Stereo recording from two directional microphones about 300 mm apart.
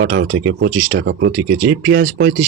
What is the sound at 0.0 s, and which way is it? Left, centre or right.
Speech, right.